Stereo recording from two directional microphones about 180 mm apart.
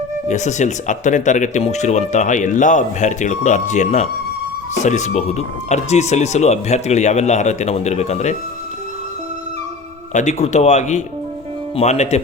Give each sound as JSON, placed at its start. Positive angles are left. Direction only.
{"t": 0.3, "sound": "speech", "side_deg": 40}
{"t": 10.1, "sound": "speech", "side_deg": 40}